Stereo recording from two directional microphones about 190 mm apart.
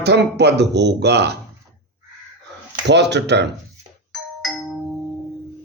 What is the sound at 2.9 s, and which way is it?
Speech, 65° right (ahead or behind).